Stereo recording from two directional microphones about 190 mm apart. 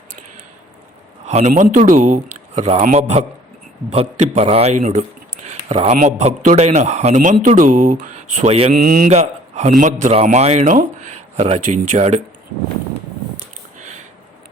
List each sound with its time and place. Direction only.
1.2 s a man's voice: 35° right (ahead or behind)
5.5 s a sound: 30° right (ahead or behind)
6.0 s a man's voice: 35° right (ahead or behind)
8.7 s mantra: 50° right (ahead or behind)
9.0 s a man's voice: 35° right (ahead or behind)